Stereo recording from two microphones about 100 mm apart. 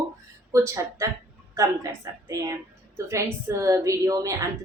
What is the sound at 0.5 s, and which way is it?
A woman's voice, 30° right (ahead or behind).